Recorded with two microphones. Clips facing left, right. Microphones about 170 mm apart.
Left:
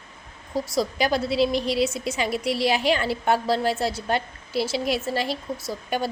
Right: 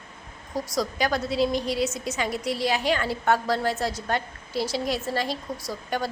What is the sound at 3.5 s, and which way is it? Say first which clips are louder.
Speech: left 2 dB; 30° left (ahead or behind).